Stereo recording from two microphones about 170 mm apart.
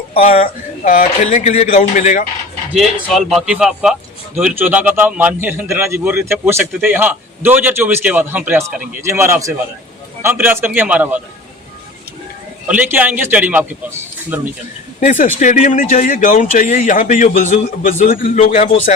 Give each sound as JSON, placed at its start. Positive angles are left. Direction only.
{"t": 0.2, "sound": "speech", "side_deg": 40}
{"t": 2.7, "sound": "a man's voice", "side_deg": 0}
{"t": 12.6, "sound": "a man's voice", "side_deg": -10}
{"t": 15.0, "sound": "speech", "side_deg": 45}